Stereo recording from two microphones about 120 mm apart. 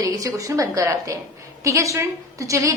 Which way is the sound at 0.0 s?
30° right (ahead or behind).